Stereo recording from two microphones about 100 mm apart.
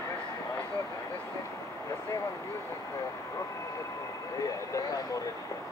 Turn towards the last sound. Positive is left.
turn(degrees=35)  # may be behind; listen again after turning